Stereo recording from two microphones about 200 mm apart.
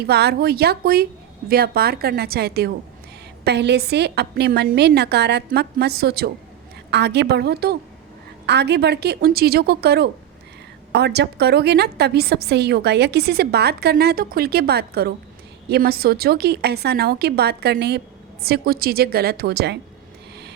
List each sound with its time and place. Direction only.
0.0 s a woman's voice: 55° right (ahead or behind)